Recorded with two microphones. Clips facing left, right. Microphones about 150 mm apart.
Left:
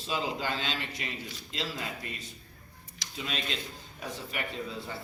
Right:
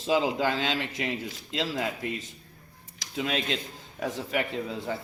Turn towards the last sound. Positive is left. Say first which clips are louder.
# right 5 dB
turn(degrees=-90)